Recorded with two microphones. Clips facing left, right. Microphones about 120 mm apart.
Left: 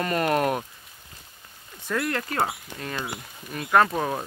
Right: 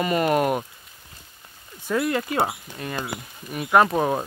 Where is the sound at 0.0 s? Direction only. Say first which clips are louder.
Right 2 dB; 5° right (ahead or behind).